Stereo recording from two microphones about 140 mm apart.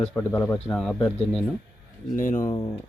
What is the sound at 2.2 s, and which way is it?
Speech, 70° left (ahead or behind).